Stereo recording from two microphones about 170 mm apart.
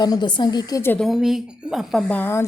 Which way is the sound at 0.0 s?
25° left (ahead or behind).